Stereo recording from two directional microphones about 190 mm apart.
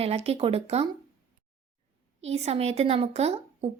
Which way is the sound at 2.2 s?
35° right (ahead or behind).